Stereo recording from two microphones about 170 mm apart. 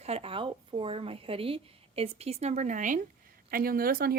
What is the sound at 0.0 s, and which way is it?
Speech, 35° right (ahead or behind).